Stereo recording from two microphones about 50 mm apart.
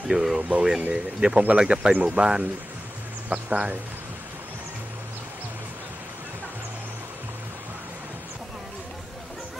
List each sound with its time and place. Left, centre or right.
0.1 s speech: centre
0.4 s speech: right